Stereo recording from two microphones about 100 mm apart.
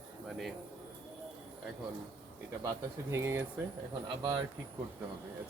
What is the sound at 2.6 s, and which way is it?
Speech, 30° right (ahead or behind).